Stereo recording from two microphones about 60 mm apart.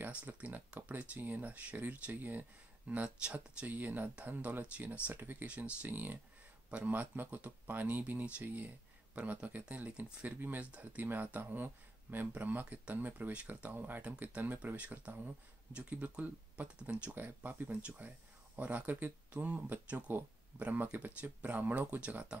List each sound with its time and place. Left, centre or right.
0.0 s a sound: right
0.3 s speech: right
2.9 s speech: centre
3.6 s speech: right
22.0 s speech: centre